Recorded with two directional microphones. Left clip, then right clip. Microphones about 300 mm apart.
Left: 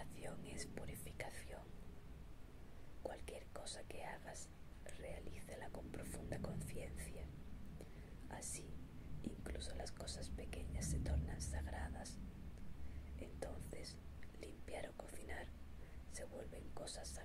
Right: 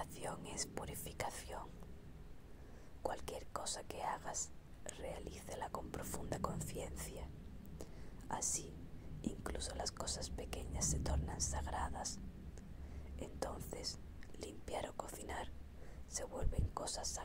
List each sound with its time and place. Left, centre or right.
0.0 s whispering: right
3.0 s speech: right
7.8 s whispering: right
9.2 s speech: right
13.2 s whispering: right
16.1 s speech: right